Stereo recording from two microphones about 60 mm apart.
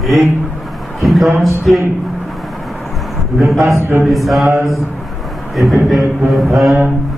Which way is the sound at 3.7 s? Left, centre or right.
Right.